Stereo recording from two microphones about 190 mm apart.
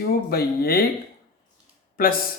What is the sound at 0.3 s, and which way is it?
Speech, 55° left (ahead or behind).